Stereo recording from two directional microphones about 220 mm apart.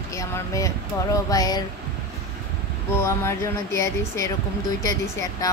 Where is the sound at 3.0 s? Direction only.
10° left (ahead or behind).